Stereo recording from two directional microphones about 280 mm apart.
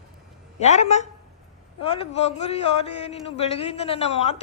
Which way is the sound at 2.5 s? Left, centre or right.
Left.